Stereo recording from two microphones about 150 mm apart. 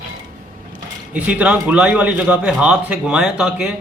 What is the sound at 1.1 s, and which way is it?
A man's voice, 10° right (ahead or behind).